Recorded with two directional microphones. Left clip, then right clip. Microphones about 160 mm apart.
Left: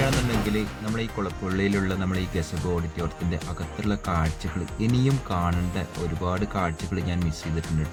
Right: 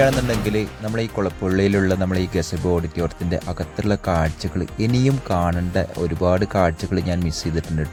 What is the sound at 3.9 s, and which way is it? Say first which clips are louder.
Speech: right 7 dB; 45° right (ahead or behind).